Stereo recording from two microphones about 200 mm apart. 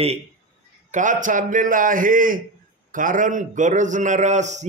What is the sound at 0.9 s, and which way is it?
A man's voice, 40° right (ahead or behind).